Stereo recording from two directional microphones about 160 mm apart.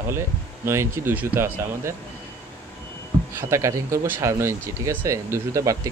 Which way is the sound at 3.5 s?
20° right (ahead or behind).